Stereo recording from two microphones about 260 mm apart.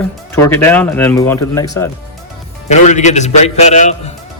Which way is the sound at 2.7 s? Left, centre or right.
Left.